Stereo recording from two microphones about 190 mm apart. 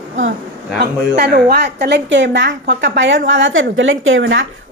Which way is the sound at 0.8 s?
60° right (ahead or behind).